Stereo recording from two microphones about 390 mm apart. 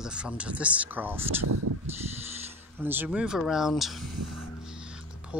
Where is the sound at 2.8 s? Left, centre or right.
Centre.